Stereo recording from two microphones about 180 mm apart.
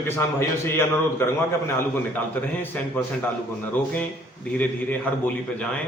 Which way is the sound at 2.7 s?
10° left (ahead or behind).